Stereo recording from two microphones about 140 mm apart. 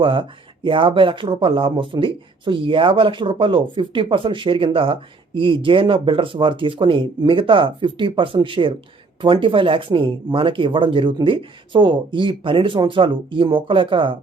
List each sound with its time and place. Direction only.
0.0 s speech: 35° right (ahead or behind)